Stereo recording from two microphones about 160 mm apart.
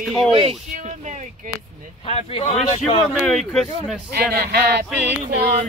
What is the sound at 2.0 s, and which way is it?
Speech, 40° left (ahead or behind).